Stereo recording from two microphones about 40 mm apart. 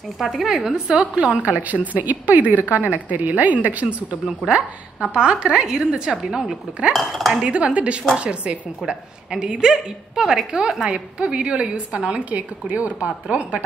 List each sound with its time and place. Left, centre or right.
0.2 s cutlery: centre
0.6 s a woman's voice: right
4.4 s a woman's voice: centre
5.2 s a woman's voice: right
6.9 s cutlery: centre
7.3 s a woman's voice: right
9.3 s a woman's voice: centre
12.3 s a woman's voice: right